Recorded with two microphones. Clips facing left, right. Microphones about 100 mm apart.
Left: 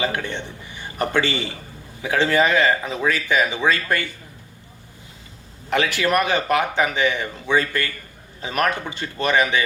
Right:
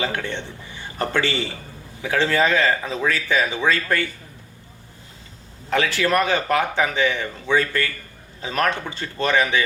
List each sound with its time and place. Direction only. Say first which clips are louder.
0.0 s a man's voice: left 1 dB; 15° left (ahead or behind)
5.7 s speech: even; 15° left (ahead or behind)